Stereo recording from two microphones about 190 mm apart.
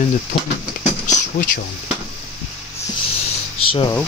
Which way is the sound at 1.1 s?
45° left (ahead or behind).